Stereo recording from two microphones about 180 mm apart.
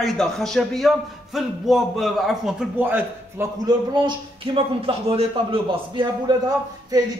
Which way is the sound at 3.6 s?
25° right (ahead or behind).